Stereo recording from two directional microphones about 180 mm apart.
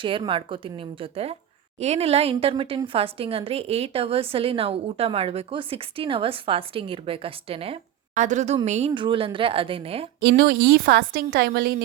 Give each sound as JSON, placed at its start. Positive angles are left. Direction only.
{"t": 0.0, "sound": "a woman's voice", "side_deg": -30}
{"t": 9.0, "sound": "a woman's voice", "side_deg": -30}
{"t": 10.2, "sound": "a woman's voice", "side_deg": -65}